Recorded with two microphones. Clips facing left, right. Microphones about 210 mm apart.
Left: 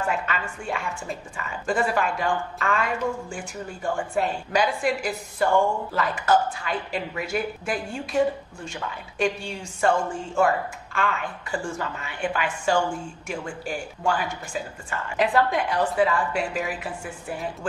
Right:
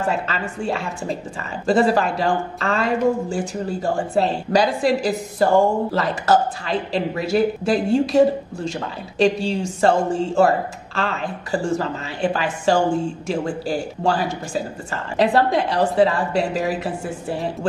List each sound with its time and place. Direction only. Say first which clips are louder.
0.0 s a woman's voice: right 4 dB; 35° right (ahead or behind)
11.1 s a woman's voice: right 6 dB; 35° right (ahead or behind)